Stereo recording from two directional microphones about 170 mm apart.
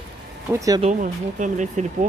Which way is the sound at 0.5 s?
20° right (ahead or behind).